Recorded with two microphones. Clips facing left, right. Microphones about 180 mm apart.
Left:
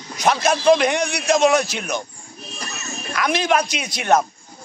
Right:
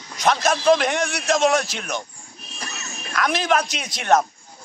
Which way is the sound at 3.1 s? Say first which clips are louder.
Left 1 dB; centre (ahead or behind).